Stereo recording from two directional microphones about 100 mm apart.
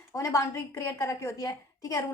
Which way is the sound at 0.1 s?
30° left (ahead or behind).